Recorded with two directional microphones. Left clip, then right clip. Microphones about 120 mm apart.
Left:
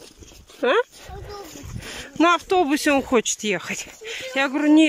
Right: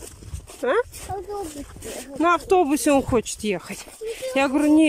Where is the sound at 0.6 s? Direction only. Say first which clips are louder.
Left 2 dB; centre (ahead or behind).